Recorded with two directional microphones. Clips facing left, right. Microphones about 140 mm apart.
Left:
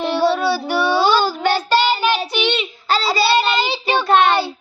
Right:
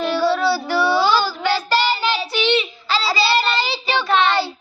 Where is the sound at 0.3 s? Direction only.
15° left (ahead or behind).